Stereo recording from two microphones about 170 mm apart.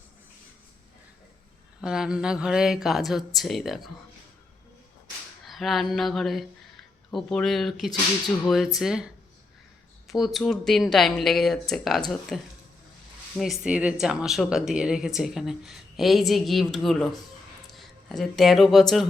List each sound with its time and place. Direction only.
1.8 s speech: 5° right (ahead or behind)
5.5 s speech: centre (ahead or behind)
10.1 s speech: centre (ahead or behind)